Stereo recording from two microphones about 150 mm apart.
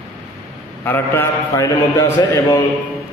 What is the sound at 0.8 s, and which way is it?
A man's voice, 15° left (ahead or behind).